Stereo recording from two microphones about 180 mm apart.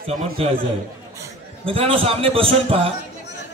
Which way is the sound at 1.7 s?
30° right (ahead or behind).